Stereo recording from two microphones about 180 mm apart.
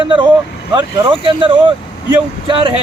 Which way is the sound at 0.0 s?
25° right (ahead or behind).